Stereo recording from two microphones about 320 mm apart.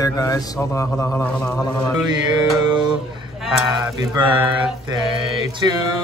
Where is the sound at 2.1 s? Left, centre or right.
Centre.